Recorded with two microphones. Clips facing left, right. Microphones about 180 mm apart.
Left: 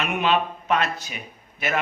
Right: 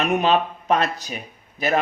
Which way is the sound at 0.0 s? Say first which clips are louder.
Right 3 dB; 40° right (ahead or behind).